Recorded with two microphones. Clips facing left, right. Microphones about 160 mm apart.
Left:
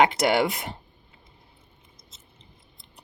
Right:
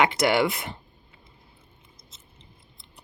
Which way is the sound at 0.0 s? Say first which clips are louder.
Left 1 dB; 40° left (ahead or behind).